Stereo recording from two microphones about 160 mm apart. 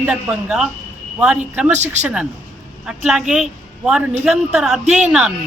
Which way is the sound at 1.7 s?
45° right (ahead or behind).